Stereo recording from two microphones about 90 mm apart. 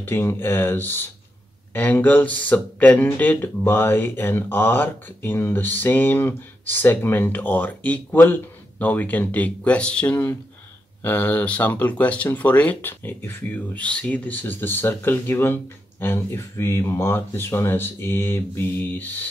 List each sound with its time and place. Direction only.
0.0 s speech: 25° left (ahead or behind)